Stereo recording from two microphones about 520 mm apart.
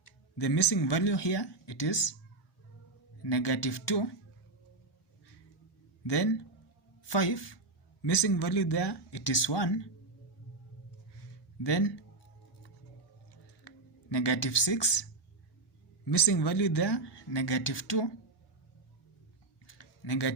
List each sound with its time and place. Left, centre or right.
0.0 s speech: left
3.2 s speech: left
6.1 s speech: left
11.6 s speech: left
13.7 s speech: left
16.0 s speech: left
19.6 s a sound: left